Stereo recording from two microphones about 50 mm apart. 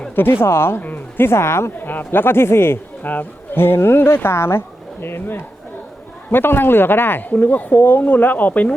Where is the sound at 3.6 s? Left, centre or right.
Left.